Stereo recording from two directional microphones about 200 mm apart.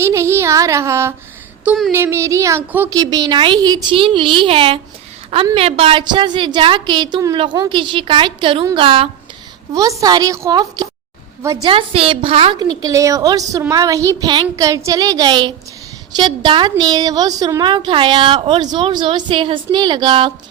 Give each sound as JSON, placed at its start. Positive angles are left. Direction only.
{"t": 0.0, "sound": "a woman's voice", "side_deg": -15}
{"t": 1.6, "sound": "speech", "side_deg": 0}
{"t": 1.9, "sound": "a woman's voice", "side_deg": -10}